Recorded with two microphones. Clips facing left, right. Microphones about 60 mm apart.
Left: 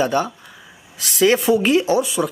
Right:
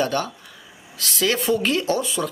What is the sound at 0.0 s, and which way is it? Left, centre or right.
Speech, centre.